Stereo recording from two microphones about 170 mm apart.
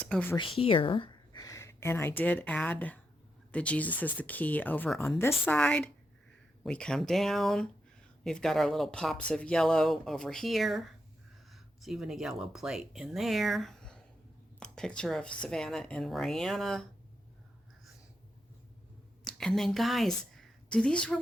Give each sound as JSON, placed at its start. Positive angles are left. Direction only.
{"t": 0.0, "sound": "speech", "side_deg": 10}
{"t": 0.3, "sound": "a woman's voice", "side_deg": 30}
{"t": 19.2, "sound": "a woman's voice", "side_deg": 0}